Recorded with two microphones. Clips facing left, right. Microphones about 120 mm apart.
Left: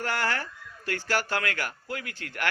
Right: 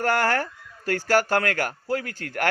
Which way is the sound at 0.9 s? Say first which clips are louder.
Right 8 dB; 45° right (ahead or behind).